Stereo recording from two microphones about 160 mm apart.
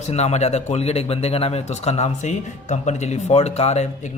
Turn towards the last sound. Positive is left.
turn(degrees=40)  # may be behind; listen again after turning